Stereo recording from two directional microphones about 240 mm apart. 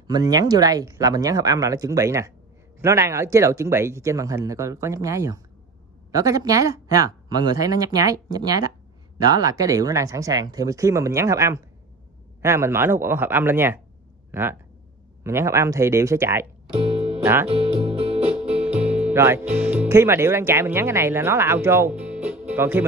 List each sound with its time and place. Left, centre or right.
0.0 s speech: centre
16.7 s music: right
17.2 s speech: centre
17.5 s music: right
18.6 s speech: centre